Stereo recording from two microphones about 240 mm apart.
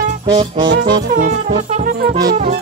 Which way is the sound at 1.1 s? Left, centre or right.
Right.